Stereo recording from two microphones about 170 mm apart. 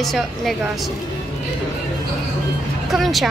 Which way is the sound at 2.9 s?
Centre (ahead or behind).